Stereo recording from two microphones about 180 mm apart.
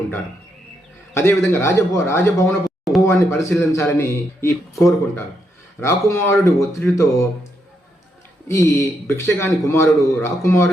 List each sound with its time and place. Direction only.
1.1 s speech: 15° left (ahead or behind)
8.4 s speech: 15° left (ahead or behind)